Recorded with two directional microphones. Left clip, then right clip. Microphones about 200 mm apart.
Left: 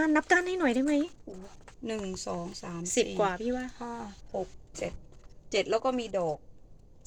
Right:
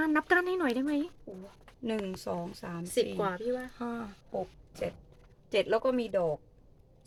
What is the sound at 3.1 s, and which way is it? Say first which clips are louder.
Speech: left 3 dB; 20° left (ahead or behind).